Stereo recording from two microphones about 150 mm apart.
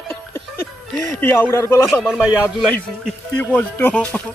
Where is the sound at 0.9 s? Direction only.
60° right (ahead or behind).